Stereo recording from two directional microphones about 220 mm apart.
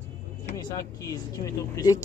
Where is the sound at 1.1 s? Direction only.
15° left (ahead or behind).